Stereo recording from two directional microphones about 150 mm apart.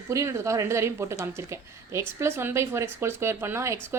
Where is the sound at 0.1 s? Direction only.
20° right (ahead or behind).